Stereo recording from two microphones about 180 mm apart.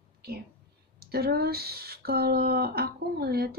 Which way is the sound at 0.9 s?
60° right (ahead or behind).